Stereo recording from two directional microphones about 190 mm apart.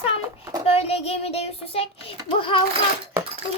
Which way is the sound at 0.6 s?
30° left (ahead or behind).